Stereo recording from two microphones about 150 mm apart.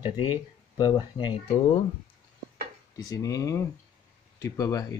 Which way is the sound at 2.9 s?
25° left (ahead or behind).